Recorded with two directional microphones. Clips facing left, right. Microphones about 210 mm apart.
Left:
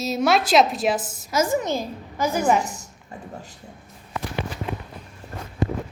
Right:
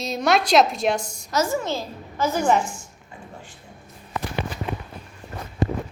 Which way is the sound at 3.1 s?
40° left (ahead or behind).